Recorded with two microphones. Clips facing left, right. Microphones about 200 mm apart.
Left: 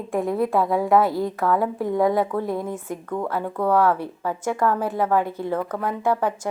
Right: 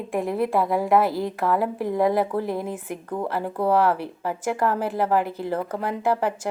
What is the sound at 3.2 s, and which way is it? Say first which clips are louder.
Speech: right 1 dB; 30° right (ahead or behind).